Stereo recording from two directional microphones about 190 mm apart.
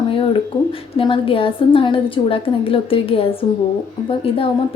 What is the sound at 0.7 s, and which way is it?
A woman's voice, 30° left (ahead or behind).